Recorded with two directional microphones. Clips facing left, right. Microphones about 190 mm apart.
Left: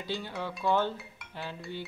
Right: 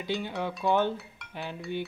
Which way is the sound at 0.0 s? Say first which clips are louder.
Right 4 dB; 20° right (ahead or behind).